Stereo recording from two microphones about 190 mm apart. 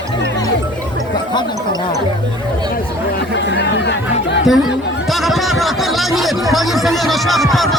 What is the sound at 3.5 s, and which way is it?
Speech, 65° left (ahead or behind).